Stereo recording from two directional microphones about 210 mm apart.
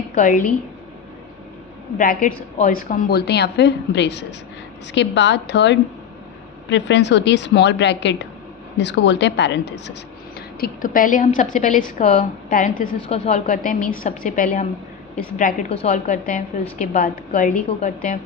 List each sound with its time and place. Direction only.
0.2 s a woman's voice: 40° left (ahead or behind)
2.0 s a woman's voice: 40° left (ahead or behind); by 10.0 s 55° left (ahead or behind)
10.6 s a woman's voice: 40° left (ahead or behind)
15.7 s a woman's voice: 30° left (ahead or behind)